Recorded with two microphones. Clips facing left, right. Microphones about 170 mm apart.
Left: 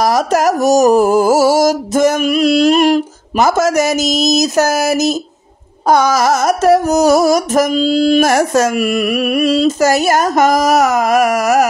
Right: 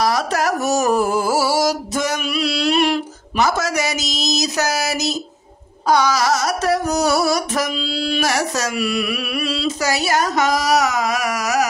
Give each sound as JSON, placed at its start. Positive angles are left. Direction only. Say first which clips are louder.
{"t": 0.0, "sound": "music", "louder": "left 6 dB", "side_deg": 45}
{"t": 5.9, "sound": "carnatic music", "louder": "left 5 dB", "side_deg": 50}